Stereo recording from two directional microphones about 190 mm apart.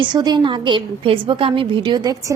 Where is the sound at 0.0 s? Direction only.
20° right (ahead or behind).